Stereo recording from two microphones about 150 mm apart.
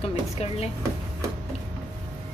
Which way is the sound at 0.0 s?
40° left (ahead or behind).